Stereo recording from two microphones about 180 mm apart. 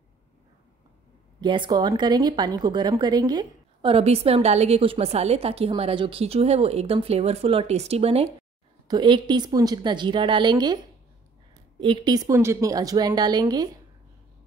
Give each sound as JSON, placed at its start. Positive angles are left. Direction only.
{"t": 1.4, "sound": "a woman's voice", "side_deg": -25}
{"t": 8.8, "sound": "a woman's voice", "side_deg": -25}
{"t": 11.8, "sound": "a woman's voice", "side_deg": -25}